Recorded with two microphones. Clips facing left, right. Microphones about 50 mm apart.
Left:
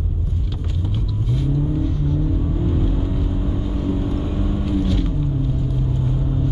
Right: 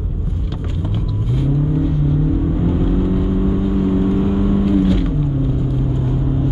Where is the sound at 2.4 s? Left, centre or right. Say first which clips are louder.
Right 5 dB; right.